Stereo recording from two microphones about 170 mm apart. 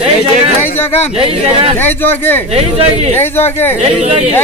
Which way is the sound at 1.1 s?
35° right (ahead or behind).